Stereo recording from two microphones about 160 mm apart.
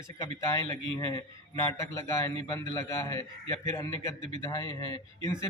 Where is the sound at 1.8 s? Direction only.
20° left (ahead or behind).